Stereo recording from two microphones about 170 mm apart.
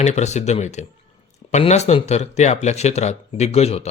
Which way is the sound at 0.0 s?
40° left (ahead or behind).